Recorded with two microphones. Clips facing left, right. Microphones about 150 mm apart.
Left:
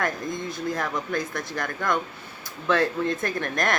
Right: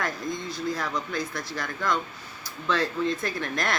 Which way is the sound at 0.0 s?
50° left (ahead or behind).